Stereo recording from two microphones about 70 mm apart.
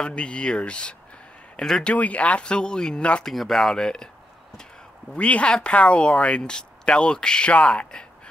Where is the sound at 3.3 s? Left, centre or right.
Centre.